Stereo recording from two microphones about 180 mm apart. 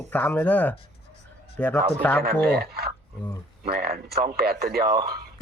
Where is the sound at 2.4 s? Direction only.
60° right (ahead or behind).